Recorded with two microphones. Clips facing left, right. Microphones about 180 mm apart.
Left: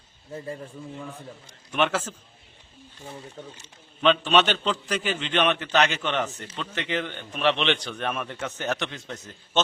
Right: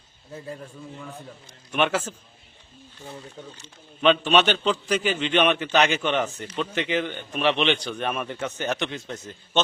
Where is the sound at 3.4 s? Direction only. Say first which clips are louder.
Even; centre (ahead or behind).